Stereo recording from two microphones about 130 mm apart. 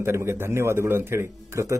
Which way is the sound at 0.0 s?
20° right (ahead or behind).